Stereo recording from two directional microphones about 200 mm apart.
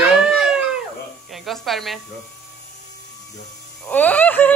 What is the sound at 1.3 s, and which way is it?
Speech, centre (ahead or behind).